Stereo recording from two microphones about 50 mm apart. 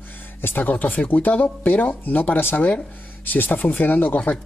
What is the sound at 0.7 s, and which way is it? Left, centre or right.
Speech, left.